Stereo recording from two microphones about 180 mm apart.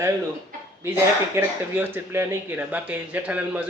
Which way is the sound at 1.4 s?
10° right (ahead or behind).